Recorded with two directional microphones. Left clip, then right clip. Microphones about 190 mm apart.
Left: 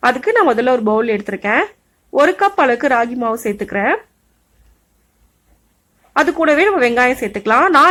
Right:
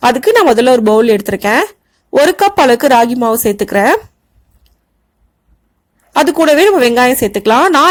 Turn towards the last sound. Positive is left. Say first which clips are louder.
# right 2 dB
turn(degrees=-30)  # may be behind; listen again after turning